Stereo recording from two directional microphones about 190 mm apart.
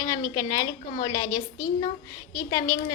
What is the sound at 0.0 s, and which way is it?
A woman's voice, 20° left (ahead or behind).